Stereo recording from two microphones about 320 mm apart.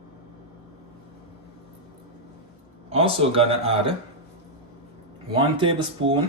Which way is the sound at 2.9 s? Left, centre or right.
Centre.